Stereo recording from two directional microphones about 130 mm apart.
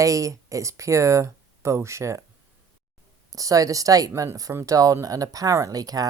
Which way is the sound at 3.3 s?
25° right (ahead or behind).